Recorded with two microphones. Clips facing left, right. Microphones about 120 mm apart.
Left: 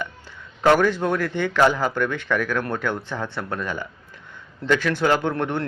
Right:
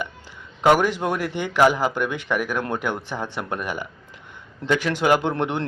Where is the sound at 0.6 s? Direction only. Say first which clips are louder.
Even; 15° right (ahead or behind).